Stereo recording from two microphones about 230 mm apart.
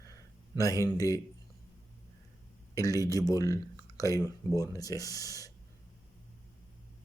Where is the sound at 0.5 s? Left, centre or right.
Centre.